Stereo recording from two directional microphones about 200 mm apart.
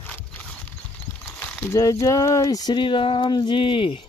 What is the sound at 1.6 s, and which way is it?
A man's voice, 15° left (ahead or behind).